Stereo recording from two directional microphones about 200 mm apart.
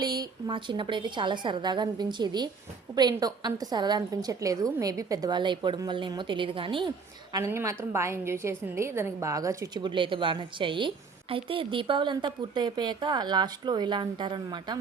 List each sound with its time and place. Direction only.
0.0 s a woman's voice: 20° right (ahead or behind)
7.3 s a woman's voice: 15° right (ahead or behind)